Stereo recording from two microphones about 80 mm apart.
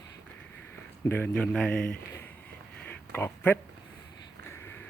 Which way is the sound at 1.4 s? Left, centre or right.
Centre.